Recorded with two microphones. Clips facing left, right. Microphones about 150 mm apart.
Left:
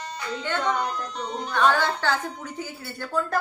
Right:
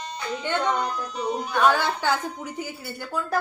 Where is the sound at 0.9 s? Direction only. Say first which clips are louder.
Right 3 dB; 5° right (ahead or behind).